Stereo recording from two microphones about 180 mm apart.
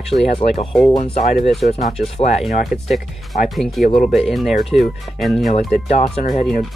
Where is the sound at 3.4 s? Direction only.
Centre (ahead or behind).